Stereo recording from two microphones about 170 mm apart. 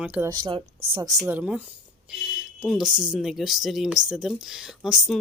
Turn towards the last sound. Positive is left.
turn(degrees=-5)  # may be behind; listen again after turning